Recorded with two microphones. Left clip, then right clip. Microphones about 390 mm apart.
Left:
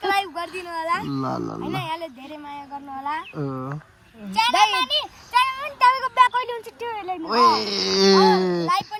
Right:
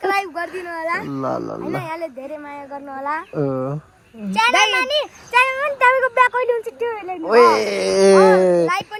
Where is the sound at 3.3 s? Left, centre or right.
Right.